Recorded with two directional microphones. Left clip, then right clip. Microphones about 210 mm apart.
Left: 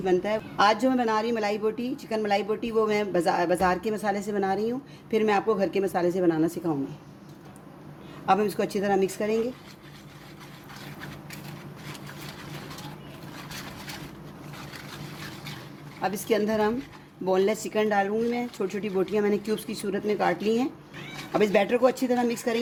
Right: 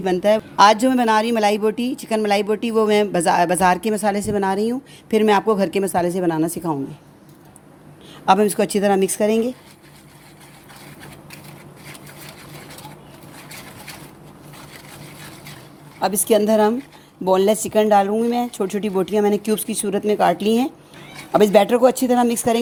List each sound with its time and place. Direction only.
0.0 s speech: 45° right (ahead or behind)
8.3 s speech: 45° right (ahead or behind)
16.0 s speech: 35° right (ahead or behind)